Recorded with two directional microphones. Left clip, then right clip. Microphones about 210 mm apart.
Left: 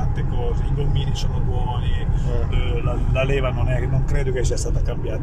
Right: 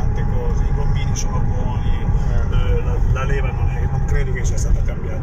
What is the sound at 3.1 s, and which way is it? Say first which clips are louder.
Speech: left 4 dB; 55° left (ahead or behind).